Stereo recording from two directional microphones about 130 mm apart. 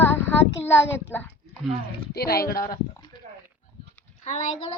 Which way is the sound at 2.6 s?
30° left (ahead or behind).